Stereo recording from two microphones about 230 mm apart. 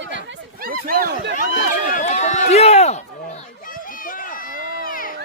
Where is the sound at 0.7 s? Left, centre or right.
Right.